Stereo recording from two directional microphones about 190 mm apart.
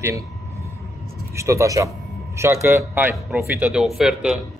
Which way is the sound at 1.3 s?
15° right (ahead or behind).